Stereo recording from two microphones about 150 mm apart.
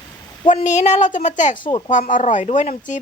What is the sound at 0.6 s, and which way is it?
Speech, 50° left (ahead or behind).